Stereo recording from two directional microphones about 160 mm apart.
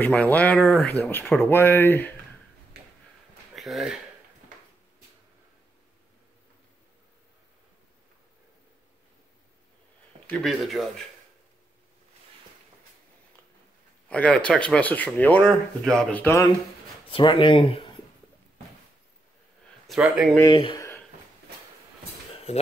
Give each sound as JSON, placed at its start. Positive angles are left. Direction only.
{"t": 0.0, "sound": "speech", "side_deg": 10}
{"t": 3.5, "sound": "speech", "side_deg": 0}
{"t": 10.2, "sound": "speech", "side_deg": 5}
{"t": 14.0, "sound": "speech", "side_deg": 10}
{"t": 17.1, "sound": "speech", "side_deg": 30}
{"t": 19.9, "sound": "speech", "side_deg": -5}
{"t": 20.4, "sound": "speech", "side_deg": 30}
{"t": 22.3, "sound": "a sound", "side_deg": 40}